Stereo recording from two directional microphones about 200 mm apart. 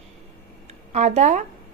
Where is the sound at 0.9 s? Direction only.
35° right (ahead or behind).